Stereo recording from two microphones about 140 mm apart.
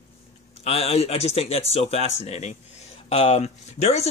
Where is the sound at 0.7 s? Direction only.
45° left (ahead or behind).